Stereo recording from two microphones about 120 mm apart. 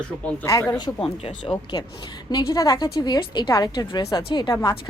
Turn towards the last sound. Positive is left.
turn(degrees=35)  # may be behind; listen again after turning